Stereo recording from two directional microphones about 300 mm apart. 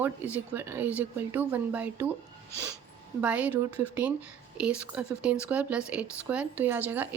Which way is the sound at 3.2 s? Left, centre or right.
Centre.